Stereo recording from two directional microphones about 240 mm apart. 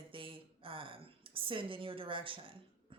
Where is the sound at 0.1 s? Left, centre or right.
Right.